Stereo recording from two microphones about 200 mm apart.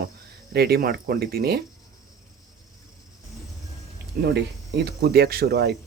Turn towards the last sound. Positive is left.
turn(degrees=-55)  # may be behind; listen again after turning